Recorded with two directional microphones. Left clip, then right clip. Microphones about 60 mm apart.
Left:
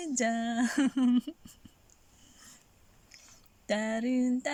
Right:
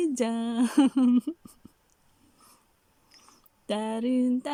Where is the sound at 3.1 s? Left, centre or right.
Right.